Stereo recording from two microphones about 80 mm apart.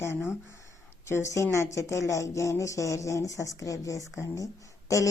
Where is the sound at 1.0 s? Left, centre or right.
Left.